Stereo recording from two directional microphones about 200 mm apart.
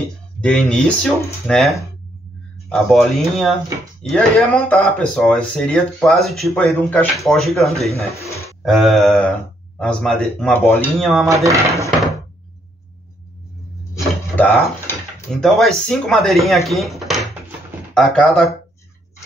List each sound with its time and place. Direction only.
0.4 s speech: 5° left (ahead or behind)
8.1 s speech: 15° left (ahead or behind)
8.6 s speech: centre (ahead or behind)
11.2 s speech: 15° right (ahead or behind)
13.9 s a sound: 10° left (ahead or behind)
15.4 s speech: centre (ahead or behind)